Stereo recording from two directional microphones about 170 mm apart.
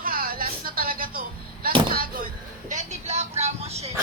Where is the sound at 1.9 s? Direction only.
55° right (ahead or behind); by 3.9 s 40° right (ahead or behind).